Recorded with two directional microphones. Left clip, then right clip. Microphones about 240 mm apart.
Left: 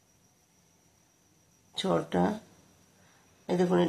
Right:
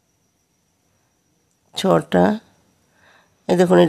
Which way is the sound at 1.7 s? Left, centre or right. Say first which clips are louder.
Right 12 dB; right.